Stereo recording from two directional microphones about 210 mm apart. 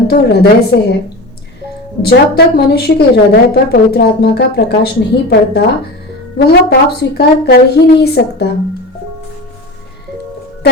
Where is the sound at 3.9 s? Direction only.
45° left (ahead or behind).